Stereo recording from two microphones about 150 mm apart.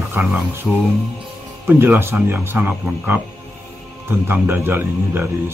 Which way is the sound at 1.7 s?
15° right (ahead or behind).